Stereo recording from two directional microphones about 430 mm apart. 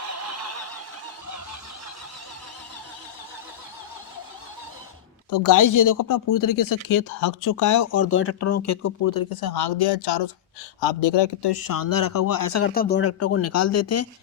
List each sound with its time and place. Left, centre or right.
5.3 s speech: left
12.6 s speech: left